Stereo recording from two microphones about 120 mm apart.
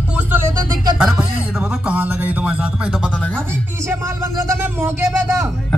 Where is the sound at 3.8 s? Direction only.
20° right (ahead or behind).